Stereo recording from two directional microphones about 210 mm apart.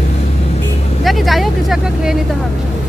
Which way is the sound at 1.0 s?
Centre (ahead or behind).